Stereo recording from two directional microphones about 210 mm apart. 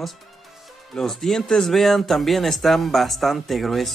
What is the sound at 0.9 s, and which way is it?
Speech, centre (ahead or behind).